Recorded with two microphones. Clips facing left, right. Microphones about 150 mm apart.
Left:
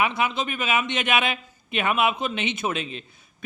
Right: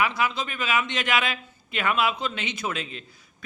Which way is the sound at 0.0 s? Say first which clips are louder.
Left 1 dB; 20° left (ahead or behind).